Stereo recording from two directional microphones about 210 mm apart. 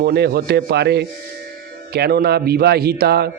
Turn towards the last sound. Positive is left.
turn(degrees=-50)  # may be behind; listen again after turning